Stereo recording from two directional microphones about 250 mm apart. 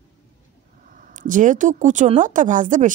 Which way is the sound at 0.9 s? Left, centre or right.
Right.